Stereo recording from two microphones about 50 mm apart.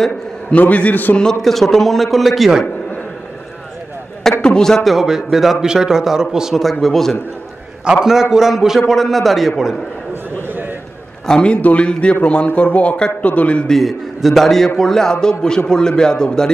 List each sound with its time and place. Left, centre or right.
0.6 s a man's voice: left
1.4 s a man's voice: centre
4.4 s a man's voice: centre
5.0 s a man's voice: centre
6.5 s a man's voice: centre
7.8 s a man's voice: centre
8.1 s a man's voice: centre
11.2 s a man's voice: centre
13.7 s a man's voice: centre